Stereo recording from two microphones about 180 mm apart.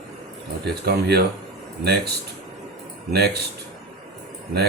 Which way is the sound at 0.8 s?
65° right (ahead or behind).